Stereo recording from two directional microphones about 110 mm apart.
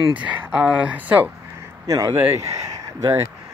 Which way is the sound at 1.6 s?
30° right (ahead or behind).